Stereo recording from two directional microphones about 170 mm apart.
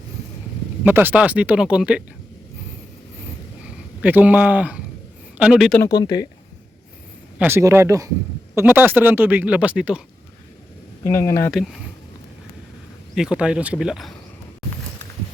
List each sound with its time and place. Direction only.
0.9 s speech: 10° right (ahead or behind)
4.0 s speech: 10° right (ahead or behind)
5.8 s speech: 25° left (ahead or behind)
7.3 s speech: 15° right (ahead or behind)
11.0 s speech: 15° left (ahead or behind)
11.5 s speech: centre (ahead or behind)
13.1 s speech: 5° right (ahead or behind)